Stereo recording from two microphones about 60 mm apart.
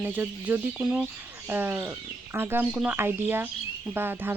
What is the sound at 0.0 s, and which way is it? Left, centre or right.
Speech, right.